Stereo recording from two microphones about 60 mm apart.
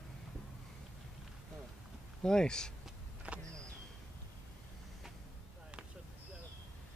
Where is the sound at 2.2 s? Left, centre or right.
Centre.